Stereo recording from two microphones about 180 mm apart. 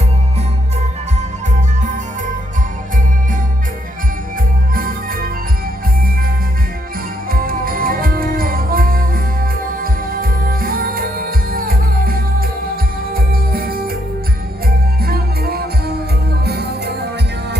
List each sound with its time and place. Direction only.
4.7 s music: 55° right (ahead or behind)
7.3 s music: 55° right (ahead or behind)
15.0 s music: 60° right (ahead or behind)